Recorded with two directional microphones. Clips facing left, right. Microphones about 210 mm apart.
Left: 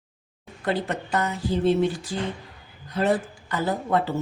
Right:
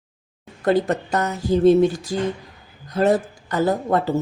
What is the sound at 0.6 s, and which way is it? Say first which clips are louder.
A woman's voice: right 7 dB; 45° right (ahead or behind).